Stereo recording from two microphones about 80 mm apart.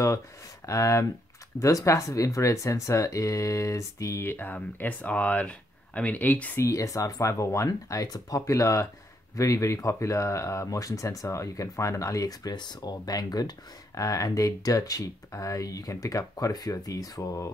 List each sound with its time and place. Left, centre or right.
0.7 s speech: left; by 6.5 s centre
6.5 s speech: left